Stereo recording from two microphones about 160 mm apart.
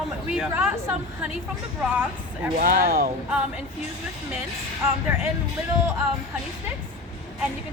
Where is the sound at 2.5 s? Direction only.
60° right (ahead or behind).